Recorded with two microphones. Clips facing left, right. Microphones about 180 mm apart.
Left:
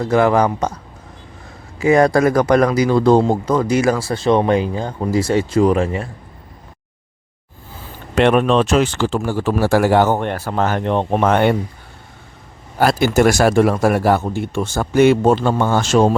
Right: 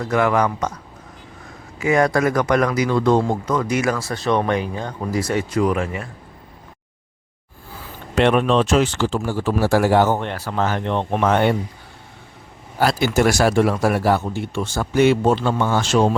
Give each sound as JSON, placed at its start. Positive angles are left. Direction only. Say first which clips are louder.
{"t": 0.0, "sound": "speech", "louder": "left 4 dB", "side_deg": 30}
{"t": 1.8, "sound": "speech", "louder": "left 4 dB", "side_deg": 35}
{"t": 8.1, "sound": "speech", "louder": "left 3 dB", "side_deg": 55}
{"t": 12.8, "sound": "speech", "louder": "left 4 dB", "side_deg": 50}